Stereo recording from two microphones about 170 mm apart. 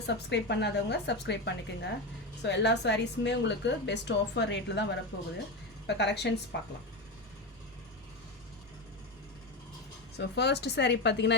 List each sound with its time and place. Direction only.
0.1 s a woman's voice: 90° left
10.2 s speech: 80° left